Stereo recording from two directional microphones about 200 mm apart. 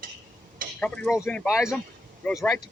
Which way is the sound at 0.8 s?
5° left (ahead or behind).